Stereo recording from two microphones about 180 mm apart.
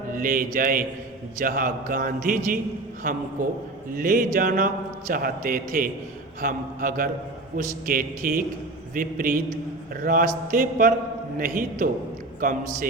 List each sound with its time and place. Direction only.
0.1 s a man's voice: 50° right (ahead or behind)